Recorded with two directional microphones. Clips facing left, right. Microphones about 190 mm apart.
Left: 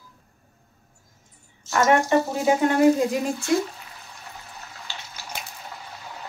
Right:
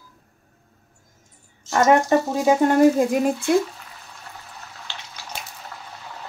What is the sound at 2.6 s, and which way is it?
Speech, 45° right (ahead or behind).